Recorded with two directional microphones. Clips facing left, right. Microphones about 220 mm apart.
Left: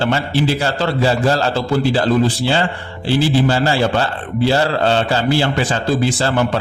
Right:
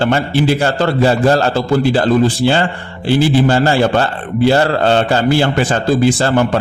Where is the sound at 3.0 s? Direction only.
50° right (ahead or behind).